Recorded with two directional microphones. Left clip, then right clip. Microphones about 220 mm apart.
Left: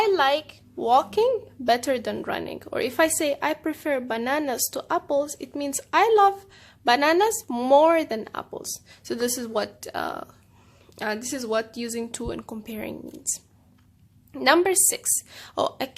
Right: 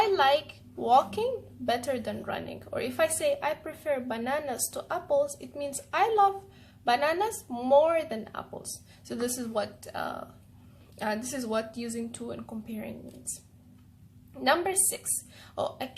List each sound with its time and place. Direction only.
0.0 s a woman's voice: 45° left (ahead or behind)
14.3 s a woman's voice: 45° left (ahead or behind)